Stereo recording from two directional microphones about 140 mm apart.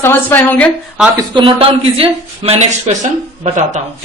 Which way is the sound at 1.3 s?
40° right (ahead or behind).